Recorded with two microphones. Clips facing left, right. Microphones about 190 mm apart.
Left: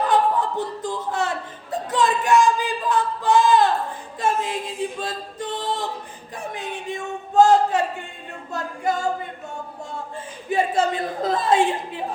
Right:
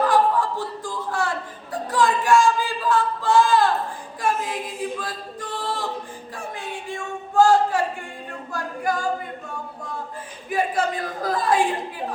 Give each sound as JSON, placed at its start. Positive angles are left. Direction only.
{"t": 0.1, "sound": "chuckle", "side_deg": 20}
{"t": 4.2, "sound": "a capella", "side_deg": 25}
{"t": 6.3, "sound": "a sound", "side_deg": 20}
{"t": 8.5, "sound": "speech", "side_deg": 25}
{"t": 10.5, "sound": "speech", "side_deg": 25}